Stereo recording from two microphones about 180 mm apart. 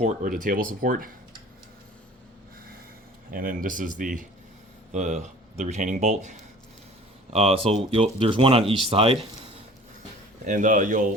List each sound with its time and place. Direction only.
0.0 s speech: 45° right (ahead or behind)
3.3 s speech: 50° right (ahead or behind)
7.3 s speech: 30° right (ahead or behind)
10.4 s speech: 45° right (ahead or behind)